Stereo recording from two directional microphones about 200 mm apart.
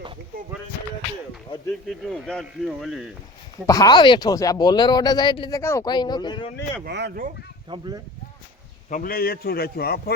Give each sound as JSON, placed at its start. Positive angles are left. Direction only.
{"t": 1.9, "sound": "speech", "side_deg": 0}
{"t": 3.7, "sound": "speech", "side_deg": 20}
{"t": 6.8, "sound": "speech", "side_deg": -55}
{"t": 7.7, "sound": "speech", "side_deg": -20}
{"t": 8.9, "sound": "a man's voice", "side_deg": 45}